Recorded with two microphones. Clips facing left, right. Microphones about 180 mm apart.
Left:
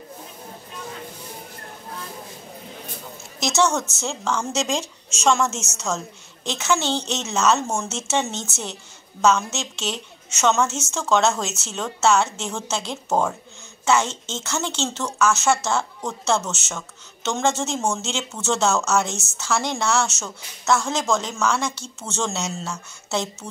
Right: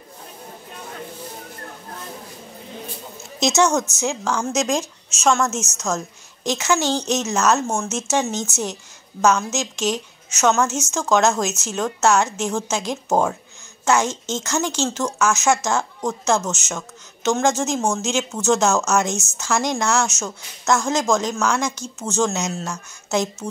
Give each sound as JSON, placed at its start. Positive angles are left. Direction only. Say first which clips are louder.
{"t": 3.3, "sound": "a woman's voice", "louder": "right 3 dB", "side_deg": -20}